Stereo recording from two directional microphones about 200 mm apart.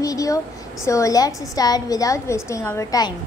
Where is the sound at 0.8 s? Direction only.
15° left (ahead or behind).